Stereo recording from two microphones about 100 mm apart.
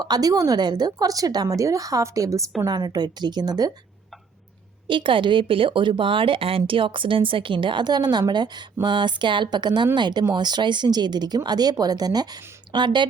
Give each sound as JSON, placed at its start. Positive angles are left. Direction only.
{"t": 0.0, "sound": "a woman's voice", "side_deg": -40}
{"t": 4.9, "sound": "speech", "side_deg": -55}